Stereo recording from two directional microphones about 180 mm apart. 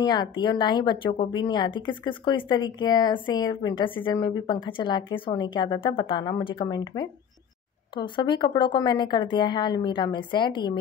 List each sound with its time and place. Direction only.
0.0 s speech: 25° left (ahead or behind)
7.9 s speech: 25° left (ahead or behind)